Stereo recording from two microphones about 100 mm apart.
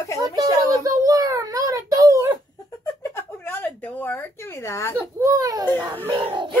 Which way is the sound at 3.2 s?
20° left (ahead or behind).